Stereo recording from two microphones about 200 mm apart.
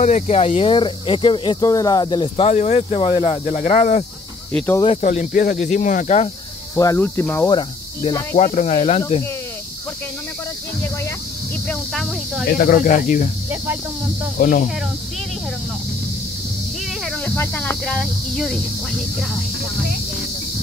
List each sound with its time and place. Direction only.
0.0 s speech: 35° left (ahead or behind)
4.6 s cricket: 10° left (ahead or behind)
4.8 s speech: 35° left (ahead or behind)
6.7 s cricket: 15° left (ahead or behind)
7.5 s speech: 25° left (ahead or behind)
8.4 s speech: 35° left (ahead or behind)
11.6 s speech: 5° left (ahead or behind)
12.4 s speech: 45° left (ahead or behind)
14.4 s speech: 40° left (ahead or behind)
17.0 s speech: 5° left (ahead or behind)